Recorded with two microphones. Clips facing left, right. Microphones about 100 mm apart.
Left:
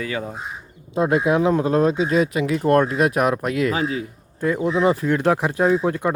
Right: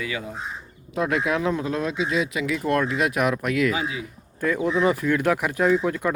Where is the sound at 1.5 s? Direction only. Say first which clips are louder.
Left 7 dB; 40° left (ahead or behind).